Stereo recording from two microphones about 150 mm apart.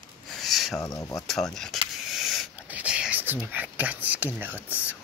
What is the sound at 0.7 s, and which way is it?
Speech, 20° left (ahead or behind).